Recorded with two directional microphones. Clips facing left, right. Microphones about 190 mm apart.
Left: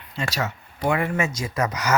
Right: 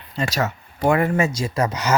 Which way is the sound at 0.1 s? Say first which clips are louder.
Right 4 dB; 40° right (ahead or behind).